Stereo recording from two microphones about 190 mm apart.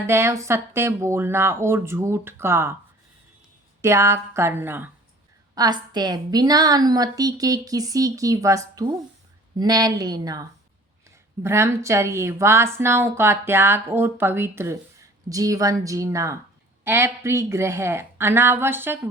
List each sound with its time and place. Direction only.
0.1 s a woman's voice: 15° right (ahead or behind)
3.8 s a woman's voice: 15° right (ahead or behind)
11.4 s a woman's voice: 15° right (ahead or behind)